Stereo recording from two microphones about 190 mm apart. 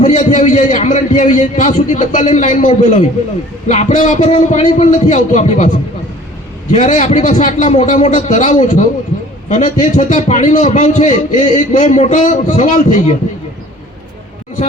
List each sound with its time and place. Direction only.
0.0 s a man's voice: 40° left (ahead or behind)